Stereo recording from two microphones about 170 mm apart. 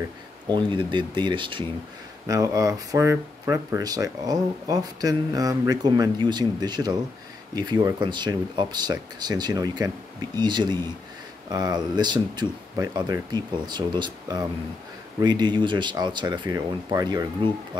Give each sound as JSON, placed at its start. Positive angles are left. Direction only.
{"t": 0.5, "sound": "speech", "side_deg": -30}